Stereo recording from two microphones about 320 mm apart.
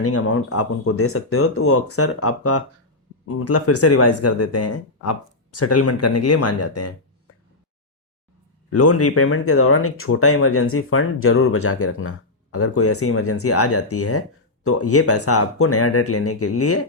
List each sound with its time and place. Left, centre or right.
0.0 s speech: left
8.7 s speech: left